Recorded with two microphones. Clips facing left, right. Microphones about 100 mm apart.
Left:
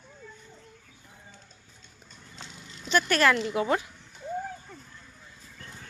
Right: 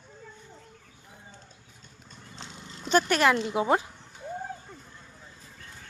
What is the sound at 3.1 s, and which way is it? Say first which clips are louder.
Speech: even; 20° right (ahead or behind).